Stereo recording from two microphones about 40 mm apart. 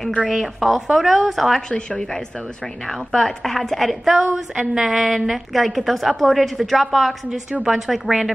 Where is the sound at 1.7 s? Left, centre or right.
Left.